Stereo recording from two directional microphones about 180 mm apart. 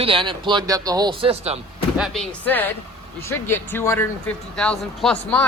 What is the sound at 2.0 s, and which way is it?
Speech, centre (ahead or behind).